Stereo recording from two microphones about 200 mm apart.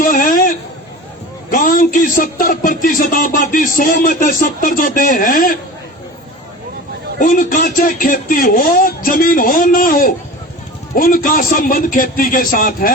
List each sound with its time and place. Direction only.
0.0 s a sound: 45° left (ahead or behind)
1.5 s speech: 45° left (ahead or behind)
7.2 s speech: 40° left (ahead or behind)